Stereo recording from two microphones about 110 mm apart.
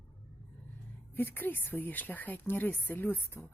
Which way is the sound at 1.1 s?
20° left (ahead or behind).